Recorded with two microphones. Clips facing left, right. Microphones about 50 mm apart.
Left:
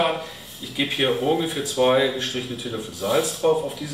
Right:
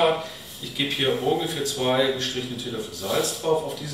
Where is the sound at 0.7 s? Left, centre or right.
Centre.